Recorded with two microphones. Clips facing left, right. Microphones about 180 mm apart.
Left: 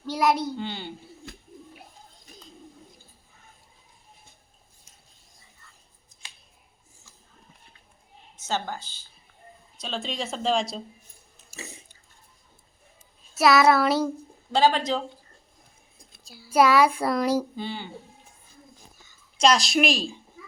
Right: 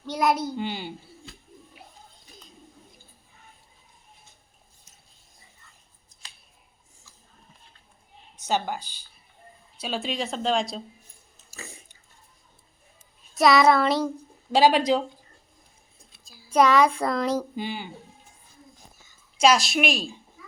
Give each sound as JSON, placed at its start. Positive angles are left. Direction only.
{"t": 0.1, "sound": "speech", "side_deg": 0}
{"t": 0.5, "sound": "speech", "side_deg": -10}
{"t": 8.4, "sound": "speech", "side_deg": -15}
{"t": 11.5, "sound": "biting", "side_deg": 20}
{"t": 13.3, "sound": "speech", "side_deg": 5}
{"t": 14.5, "sound": "speech", "side_deg": -15}
{"t": 16.2, "sound": "a sound", "side_deg": 70}
{"t": 16.5, "sound": "a child's voice", "side_deg": 5}
{"t": 17.6, "sound": "speech", "side_deg": -15}
{"t": 19.4, "sound": "speech", "side_deg": -5}